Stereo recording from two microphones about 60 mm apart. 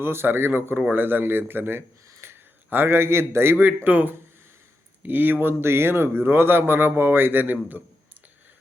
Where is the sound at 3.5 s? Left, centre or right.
Right.